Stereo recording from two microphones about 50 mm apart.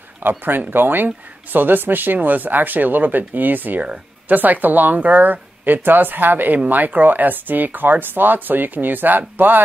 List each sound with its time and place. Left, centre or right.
0.2 s speech: right
3.8 s speech: right
4.4 s speech: right